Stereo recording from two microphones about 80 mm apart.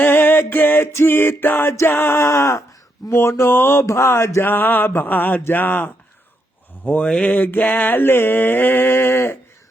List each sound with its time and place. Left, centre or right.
0.0 s music: left
1.7 s a sound: left
3.1 s mantra: left
6.8 s mantra: centre; by 9.4 s left